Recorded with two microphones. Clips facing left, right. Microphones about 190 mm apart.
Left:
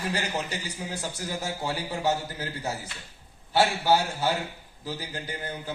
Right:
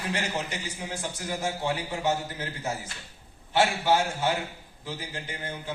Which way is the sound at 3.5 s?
35° left (ahead or behind).